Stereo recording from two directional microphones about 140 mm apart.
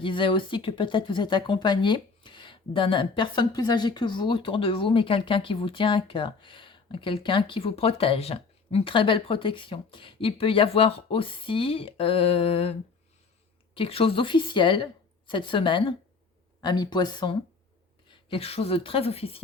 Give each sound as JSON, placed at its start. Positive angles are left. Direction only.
{"t": 0.0, "sound": "speech", "side_deg": 35}
{"t": 13.7, "sound": "speech", "side_deg": 40}